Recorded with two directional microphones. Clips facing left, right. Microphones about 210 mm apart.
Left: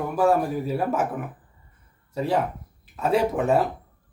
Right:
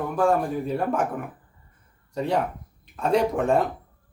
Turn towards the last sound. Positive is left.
turn(degrees=5)  # may be behind; listen again after turning